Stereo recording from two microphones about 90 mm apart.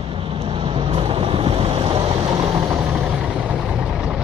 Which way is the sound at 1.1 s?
90° right.